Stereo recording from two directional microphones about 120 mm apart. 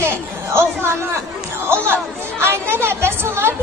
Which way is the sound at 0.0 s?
20° right (ahead or behind).